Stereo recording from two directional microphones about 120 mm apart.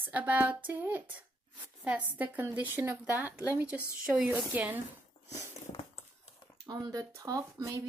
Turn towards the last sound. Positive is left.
turn(degrees=-25)  # may be behind; listen again after turning